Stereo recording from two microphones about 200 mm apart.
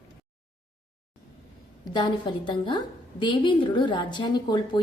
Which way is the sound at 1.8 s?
20° left (ahead or behind).